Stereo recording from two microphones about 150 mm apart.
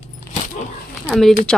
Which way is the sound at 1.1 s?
Centre (ahead or behind).